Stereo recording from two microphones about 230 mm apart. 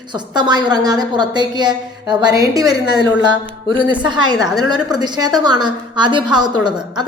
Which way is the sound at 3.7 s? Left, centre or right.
Centre.